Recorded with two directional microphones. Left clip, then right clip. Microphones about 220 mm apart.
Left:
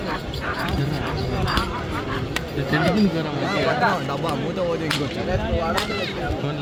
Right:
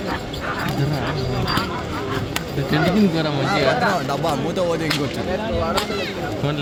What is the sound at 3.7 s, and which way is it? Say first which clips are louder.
Speech: right 2 dB; centre (ahead or behind).